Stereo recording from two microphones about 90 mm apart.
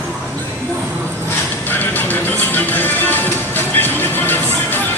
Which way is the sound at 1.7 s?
20° left (ahead or behind).